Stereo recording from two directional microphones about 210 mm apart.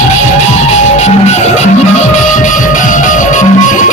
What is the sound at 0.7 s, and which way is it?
Music, 35° left (ahead or behind).